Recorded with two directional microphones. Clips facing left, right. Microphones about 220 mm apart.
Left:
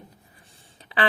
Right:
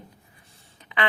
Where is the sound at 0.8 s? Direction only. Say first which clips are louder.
Left 2 dB; 35° left (ahead or behind).